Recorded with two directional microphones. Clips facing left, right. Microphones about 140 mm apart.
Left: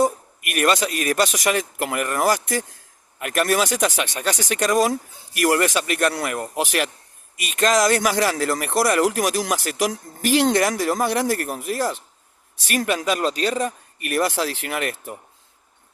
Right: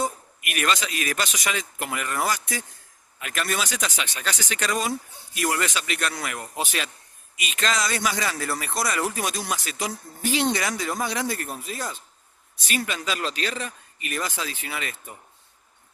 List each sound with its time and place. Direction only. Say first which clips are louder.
0.0 s speech: left 8 dB; 50° left (ahead or behind)
5.3 s speech: left 7 dB; 65° left (ahead or behind); by 6.5 s 45° left (ahead or behind)
6.6 s speech: left 6 dB; 65° left (ahead or behind)
7.4 s speech: left 8 dB; 50° left (ahead or behind); by 11.9 s 65° left (ahead or behind)
12.6 s speech: left 6 dB; 55° left (ahead or behind)
13.1 s speech: left 7 dB; 40° left (ahead or behind)
14.0 s speech: left 9 dB; 65° left (ahead or behind)